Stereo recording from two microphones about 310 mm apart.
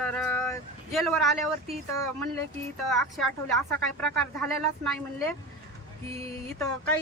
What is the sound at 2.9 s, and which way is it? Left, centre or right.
Speech, centre.